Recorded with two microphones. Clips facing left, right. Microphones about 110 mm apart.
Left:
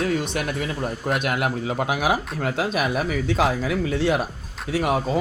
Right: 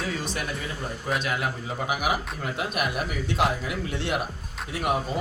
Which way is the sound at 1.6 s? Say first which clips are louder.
Left 4 dB; 90° left.